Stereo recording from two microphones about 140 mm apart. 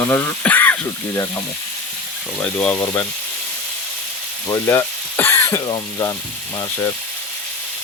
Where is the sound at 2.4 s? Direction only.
10° left (ahead or behind).